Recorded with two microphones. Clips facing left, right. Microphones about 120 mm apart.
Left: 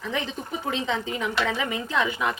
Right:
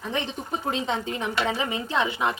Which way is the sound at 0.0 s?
30° right (ahead or behind).